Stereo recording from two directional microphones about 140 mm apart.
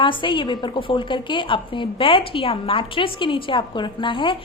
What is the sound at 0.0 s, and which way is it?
A woman's voice, 35° left (ahead or behind).